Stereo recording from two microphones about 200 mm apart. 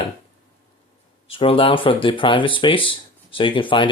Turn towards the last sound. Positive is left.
turn(degrees=25)  # may be behind; listen again after turning